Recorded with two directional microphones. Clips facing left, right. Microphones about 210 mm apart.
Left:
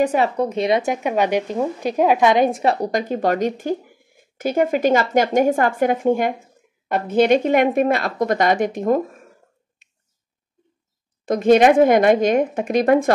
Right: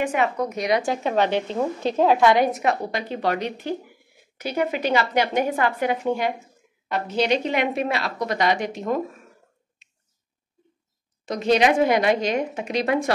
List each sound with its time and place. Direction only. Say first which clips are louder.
0.0 s a woman's voice: left 5 dB; 35° left (ahead or behind)
11.2 s a woman's voice: left 6 dB; 50° left (ahead or behind)